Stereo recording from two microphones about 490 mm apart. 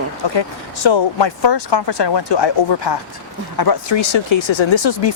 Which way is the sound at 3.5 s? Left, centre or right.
Left.